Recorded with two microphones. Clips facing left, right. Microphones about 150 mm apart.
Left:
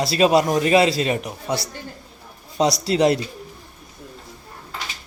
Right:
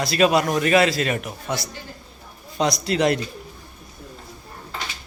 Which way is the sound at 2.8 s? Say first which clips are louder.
Left 3 dB; 30° left (ahead or behind).